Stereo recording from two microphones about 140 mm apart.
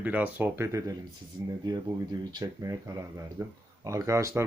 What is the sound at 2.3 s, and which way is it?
A man's voice, 25° right (ahead or behind).